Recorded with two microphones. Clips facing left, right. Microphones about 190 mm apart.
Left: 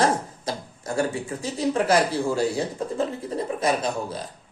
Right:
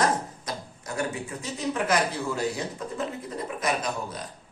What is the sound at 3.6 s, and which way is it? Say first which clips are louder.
Speech: left 4 dB; 30° left (ahead or behind).